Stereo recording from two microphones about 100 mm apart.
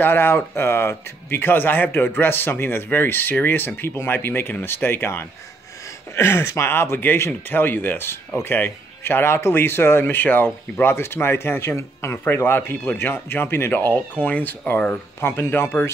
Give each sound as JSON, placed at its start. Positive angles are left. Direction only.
{"t": 0.0, "sound": "speech", "side_deg": 25}